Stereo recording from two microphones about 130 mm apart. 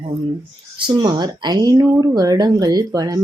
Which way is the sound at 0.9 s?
35° right (ahead or behind).